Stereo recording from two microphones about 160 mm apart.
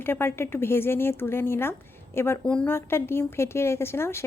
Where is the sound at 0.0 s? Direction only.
15° left (ahead or behind).